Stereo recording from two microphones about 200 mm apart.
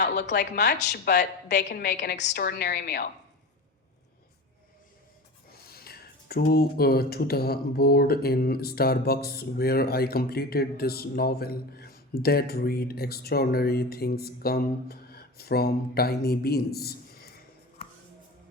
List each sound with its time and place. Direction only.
0.0 s a woman's voice: 55° left (ahead or behind)
5.5 s speech: 50° left (ahead or behind)